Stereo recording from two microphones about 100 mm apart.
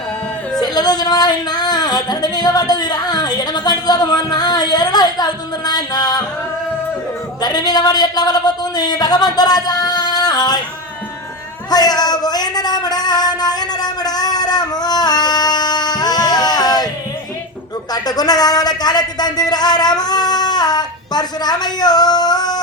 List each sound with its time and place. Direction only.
0.6 s speech: 45° left (ahead or behind)
7.4 s speech: 45° left (ahead or behind)
11.7 s a sound: 40° left (ahead or behind)
17.9 s speech: 40° left (ahead or behind)